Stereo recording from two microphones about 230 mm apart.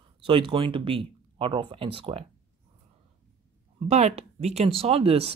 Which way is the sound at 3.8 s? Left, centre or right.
Right.